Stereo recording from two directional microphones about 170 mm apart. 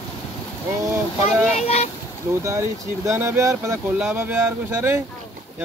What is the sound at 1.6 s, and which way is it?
Speech, 40° left (ahead or behind).